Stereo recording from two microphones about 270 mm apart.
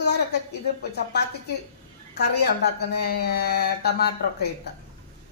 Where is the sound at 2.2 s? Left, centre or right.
Left.